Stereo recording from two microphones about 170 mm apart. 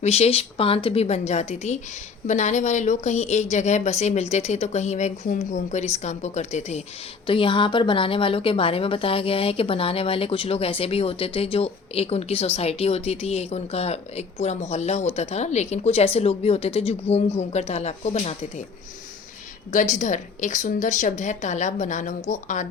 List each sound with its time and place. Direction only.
0.0 s a woman's voice: 40° left (ahead or behind)
7.3 s a woman's voice: 30° left (ahead or behind)
19.7 s a woman's voice: 50° left (ahead or behind)